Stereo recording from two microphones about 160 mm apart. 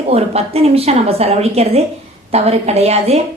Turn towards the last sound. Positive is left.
turn(degrees=-40)  # may be behind; listen again after turning